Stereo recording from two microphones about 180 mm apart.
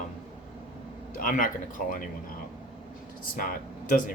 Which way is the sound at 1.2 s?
50° left (ahead or behind).